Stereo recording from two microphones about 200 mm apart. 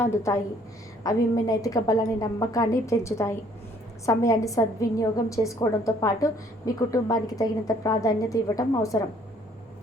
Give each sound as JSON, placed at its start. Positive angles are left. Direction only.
{"t": 0.0, "sound": "a woman's voice", "side_deg": 15}